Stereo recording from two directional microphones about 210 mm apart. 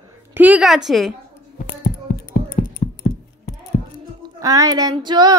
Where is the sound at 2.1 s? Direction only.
40° left (ahead or behind).